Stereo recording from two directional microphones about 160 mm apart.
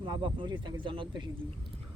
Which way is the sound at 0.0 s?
30° right (ahead or behind).